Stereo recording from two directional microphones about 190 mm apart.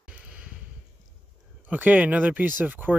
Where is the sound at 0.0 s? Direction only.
5° right (ahead or behind).